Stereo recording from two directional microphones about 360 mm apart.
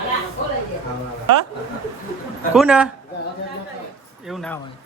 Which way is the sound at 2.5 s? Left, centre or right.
Centre.